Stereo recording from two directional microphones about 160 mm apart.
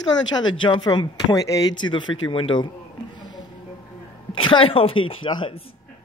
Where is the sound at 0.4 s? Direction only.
30° left (ahead or behind).